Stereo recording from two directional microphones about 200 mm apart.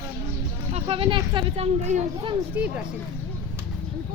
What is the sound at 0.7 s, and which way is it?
Speech, 30° right (ahead or behind).